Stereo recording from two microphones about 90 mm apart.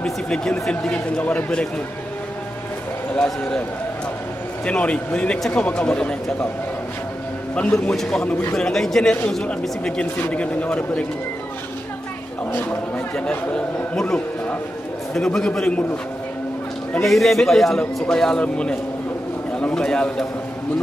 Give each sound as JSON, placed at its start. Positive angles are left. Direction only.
{"t": 0.0, "sound": "speech", "side_deg": 5}
{"t": 3.2, "sound": "speech", "side_deg": 10}
{"t": 4.6, "sound": "speech", "side_deg": 15}
{"t": 7.5, "sound": "a man's voice", "side_deg": 15}
{"t": 12.5, "sound": "speech", "side_deg": 20}
{"t": 17.0, "sound": "a man's voice", "side_deg": 0}